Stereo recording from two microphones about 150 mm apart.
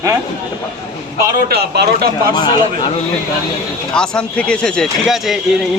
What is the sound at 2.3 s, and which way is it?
Speech, 30° left (ahead or behind).